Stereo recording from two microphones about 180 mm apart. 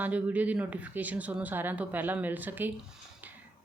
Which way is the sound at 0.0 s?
10° right (ahead or behind).